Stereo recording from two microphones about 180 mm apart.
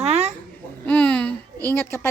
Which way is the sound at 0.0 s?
35° right (ahead or behind).